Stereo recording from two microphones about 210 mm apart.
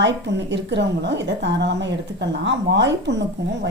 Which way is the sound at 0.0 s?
55° right (ahead or behind).